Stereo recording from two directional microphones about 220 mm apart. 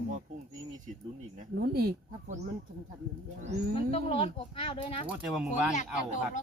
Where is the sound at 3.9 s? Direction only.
25° left (ahead or behind).